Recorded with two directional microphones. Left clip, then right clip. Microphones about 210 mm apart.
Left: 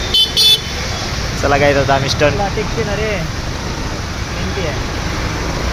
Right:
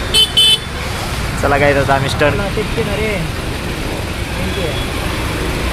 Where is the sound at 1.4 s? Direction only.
Centre (ahead or behind).